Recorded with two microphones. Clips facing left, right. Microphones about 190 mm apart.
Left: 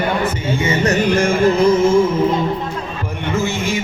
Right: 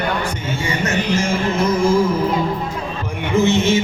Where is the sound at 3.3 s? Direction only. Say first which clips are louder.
Right 6 dB; 20° right (ahead or behind).